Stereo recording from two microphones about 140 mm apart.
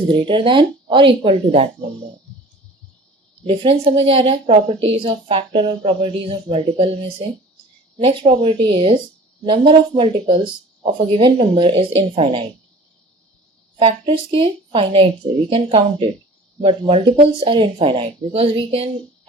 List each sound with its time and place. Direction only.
0.1 s a woman's voice: 35° right (ahead or behind)
3.4 s a woman's voice: 40° right (ahead or behind)
13.7 s a woman's voice: 40° right (ahead or behind)